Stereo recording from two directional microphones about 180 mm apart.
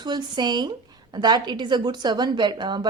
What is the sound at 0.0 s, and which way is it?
Speech, 25° right (ahead or behind).